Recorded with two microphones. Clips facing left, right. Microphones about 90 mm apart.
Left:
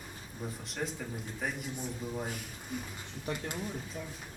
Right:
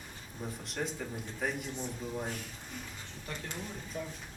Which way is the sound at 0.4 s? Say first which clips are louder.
Even; centre (ahead or behind).